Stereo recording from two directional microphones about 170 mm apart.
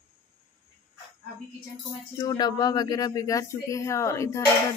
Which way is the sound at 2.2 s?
25° left (ahead or behind).